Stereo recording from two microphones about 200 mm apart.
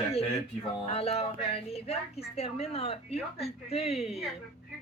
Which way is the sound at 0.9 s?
30° left (ahead or behind).